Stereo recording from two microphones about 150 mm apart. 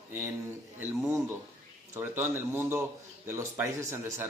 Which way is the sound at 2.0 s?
15° right (ahead or behind).